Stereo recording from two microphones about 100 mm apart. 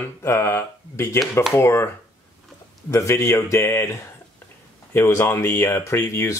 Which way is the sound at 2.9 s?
30° left (ahead or behind).